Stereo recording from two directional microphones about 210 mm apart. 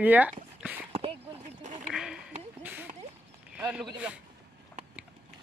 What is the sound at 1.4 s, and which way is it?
Duck, 35° right (ahead or behind).